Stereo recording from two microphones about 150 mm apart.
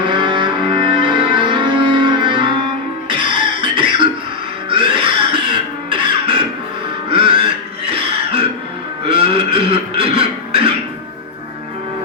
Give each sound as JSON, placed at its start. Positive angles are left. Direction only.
{"t": 0.0, "sound": "music", "side_deg": -35}
{"t": 7.9, "sound": "throat clearing", "side_deg": -40}
{"t": 9.1, "sound": "a sound", "side_deg": -40}